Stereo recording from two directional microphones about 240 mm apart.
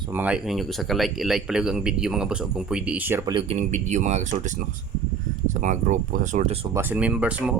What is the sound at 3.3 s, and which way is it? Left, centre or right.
Speech, right.